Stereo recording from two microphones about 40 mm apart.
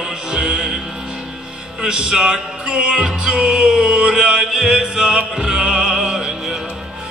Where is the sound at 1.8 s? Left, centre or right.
Centre.